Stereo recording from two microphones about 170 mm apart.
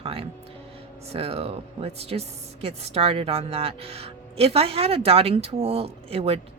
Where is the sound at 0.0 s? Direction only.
35° right (ahead or behind).